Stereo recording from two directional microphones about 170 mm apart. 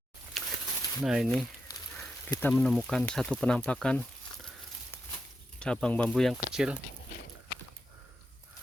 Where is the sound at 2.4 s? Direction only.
Centre (ahead or behind).